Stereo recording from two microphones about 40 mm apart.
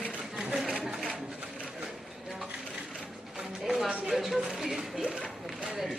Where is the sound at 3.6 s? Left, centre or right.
Centre.